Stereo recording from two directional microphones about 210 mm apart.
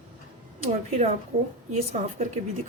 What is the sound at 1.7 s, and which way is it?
Speech, 30° right (ahead or behind).